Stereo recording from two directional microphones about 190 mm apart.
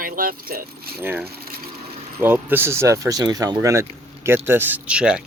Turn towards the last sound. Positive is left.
turn(degrees=-5)  # may be behind; listen again after turning